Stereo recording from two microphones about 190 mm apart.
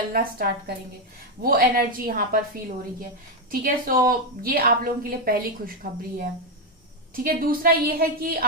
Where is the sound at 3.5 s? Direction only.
50° right (ahead or behind).